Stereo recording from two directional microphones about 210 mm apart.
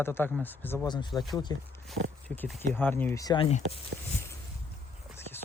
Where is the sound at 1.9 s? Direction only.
10° left (ahead or behind).